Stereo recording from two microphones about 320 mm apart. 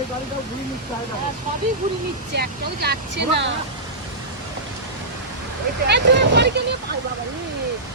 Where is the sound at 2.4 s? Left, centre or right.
Right.